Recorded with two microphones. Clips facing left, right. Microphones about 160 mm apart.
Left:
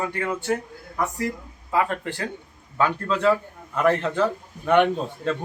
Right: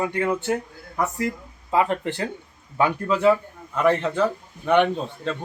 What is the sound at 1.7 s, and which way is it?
A man's voice, 20° right (ahead or behind).